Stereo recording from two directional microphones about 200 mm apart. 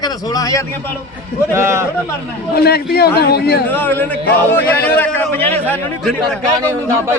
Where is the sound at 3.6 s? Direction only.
10° left (ahead or behind).